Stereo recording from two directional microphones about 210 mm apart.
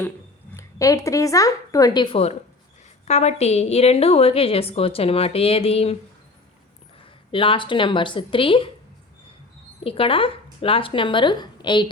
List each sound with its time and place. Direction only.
0.5 s a woman's voice: 15° left (ahead or behind)
7.3 s a woman's voice: 25° left (ahead or behind)
9.8 s a woman's voice: 25° left (ahead or behind)